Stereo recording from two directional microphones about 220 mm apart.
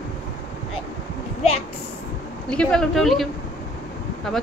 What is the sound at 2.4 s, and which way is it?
A woman's voice, 5° left (ahead or behind).